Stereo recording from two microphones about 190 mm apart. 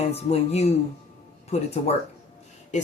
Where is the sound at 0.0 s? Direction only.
35° left (ahead or behind).